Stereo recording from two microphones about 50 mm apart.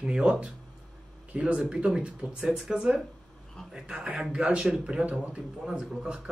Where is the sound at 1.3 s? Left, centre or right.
Right.